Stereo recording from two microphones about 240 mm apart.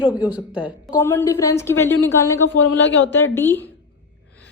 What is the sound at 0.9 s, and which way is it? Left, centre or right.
A woman's voice, centre.